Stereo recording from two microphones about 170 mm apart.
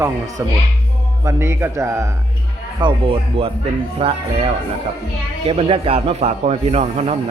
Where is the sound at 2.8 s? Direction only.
30° right (ahead or behind).